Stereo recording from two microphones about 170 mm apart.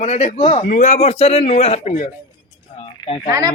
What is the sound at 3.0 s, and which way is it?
Speech, 30° left (ahead or behind).